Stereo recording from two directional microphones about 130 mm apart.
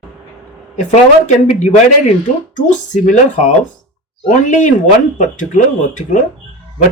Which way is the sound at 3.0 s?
70° left (ahead or behind).